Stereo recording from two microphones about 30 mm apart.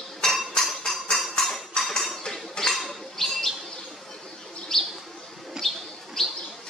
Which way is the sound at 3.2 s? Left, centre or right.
Centre.